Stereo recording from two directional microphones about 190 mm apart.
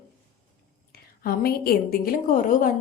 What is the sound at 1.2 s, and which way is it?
A woman's voice, 50° left (ahead or behind).